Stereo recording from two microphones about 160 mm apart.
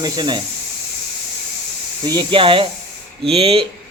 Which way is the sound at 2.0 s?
30° right (ahead or behind).